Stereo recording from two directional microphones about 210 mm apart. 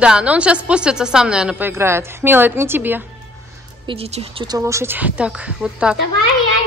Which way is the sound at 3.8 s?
30° right (ahead or behind).